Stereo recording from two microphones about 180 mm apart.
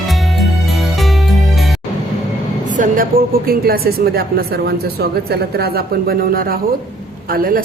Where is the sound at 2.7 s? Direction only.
50° right (ahead or behind).